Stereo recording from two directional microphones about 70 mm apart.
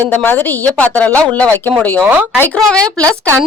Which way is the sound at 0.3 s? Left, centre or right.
Left.